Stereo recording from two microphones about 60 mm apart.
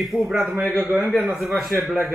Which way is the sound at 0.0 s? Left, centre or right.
Centre.